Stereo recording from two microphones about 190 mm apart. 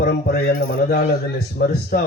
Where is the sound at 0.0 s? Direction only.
55° left (ahead or behind).